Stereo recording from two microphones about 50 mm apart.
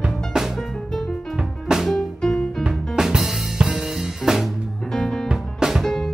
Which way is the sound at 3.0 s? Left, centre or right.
Centre.